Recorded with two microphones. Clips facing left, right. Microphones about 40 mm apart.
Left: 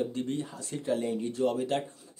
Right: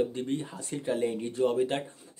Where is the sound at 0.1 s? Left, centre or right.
Centre.